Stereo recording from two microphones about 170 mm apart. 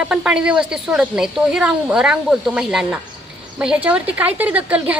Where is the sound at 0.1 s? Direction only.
5° right (ahead or behind).